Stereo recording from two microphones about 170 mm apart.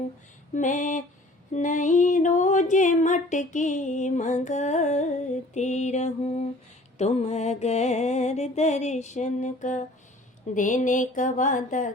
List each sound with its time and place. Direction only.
0.5 s music: 45° left (ahead or behind)